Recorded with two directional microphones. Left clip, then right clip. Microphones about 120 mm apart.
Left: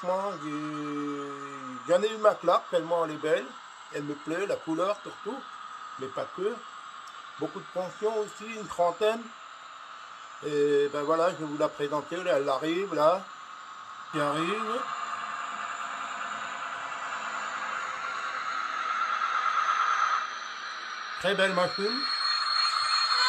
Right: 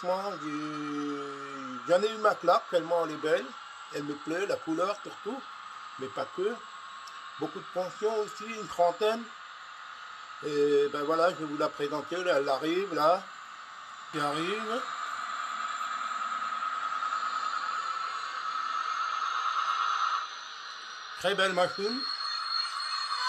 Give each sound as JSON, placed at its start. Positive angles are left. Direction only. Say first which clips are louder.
{"t": 0.0, "sound": "a man's voice", "louder": "left 2 dB", "side_deg": 10}
{"t": 7.7, "sound": "a man's voice", "louder": "even", "side_deg": 15}
{"t": 10.4, "sound": "a man's voice", "louder": "left 1 dB", "side_deg": 10}
{"t": 17.0, "sound": "a sound", "louder": "right 2 dB", "side_deg": 5}
{"t": 21.2, "sound": "a man's voice", "louder": "left 1 dB", "side_deg": 5}
{"t": 21.9, "sound": "radio", "louder": "left 5 dB", "side_deg": 55}